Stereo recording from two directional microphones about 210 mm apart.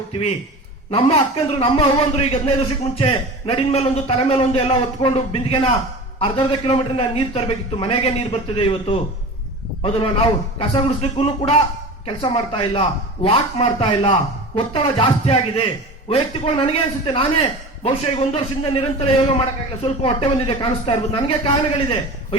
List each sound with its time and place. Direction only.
0.9 s a man's voice: 30° left (ahead or behind)